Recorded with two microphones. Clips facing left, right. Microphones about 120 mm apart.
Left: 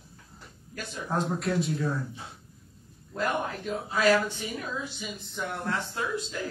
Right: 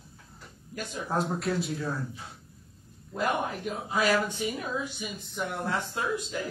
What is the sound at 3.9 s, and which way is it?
Speech, 15° right (ahead or behind).